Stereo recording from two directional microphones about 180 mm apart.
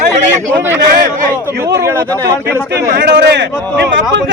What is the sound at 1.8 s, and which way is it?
Speech, 15° right (ahead or behind).